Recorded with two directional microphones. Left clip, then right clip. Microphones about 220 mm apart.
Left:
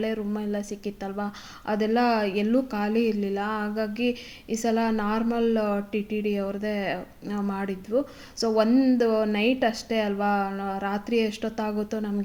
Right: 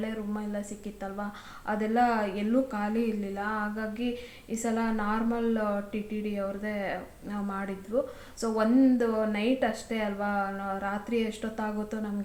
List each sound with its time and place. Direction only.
0.0 s speech: 35° left (ahead or behind)